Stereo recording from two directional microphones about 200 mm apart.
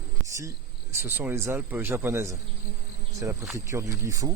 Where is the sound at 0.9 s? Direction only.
10° right (ahead or behind).